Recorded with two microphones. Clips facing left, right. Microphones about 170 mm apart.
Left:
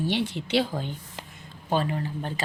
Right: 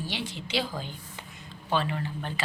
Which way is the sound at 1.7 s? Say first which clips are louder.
Left 2 dB; 40° left (ahead or behind).